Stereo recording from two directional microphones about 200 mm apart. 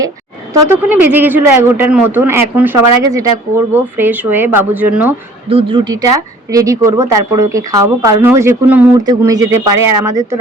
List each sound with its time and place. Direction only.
0.7 s a man's voice: 10° right (ahead or behind)
5.5 s a man's voice: 25° right (ahead or behind)